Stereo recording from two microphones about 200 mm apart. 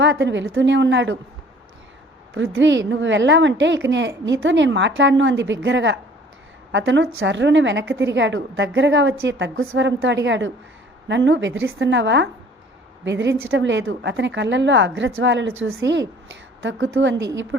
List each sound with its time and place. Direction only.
0.0 s a woman's voice: 65° right (ahead or behind)
2.3 s a woman's voice: 75° right (ahead or behind)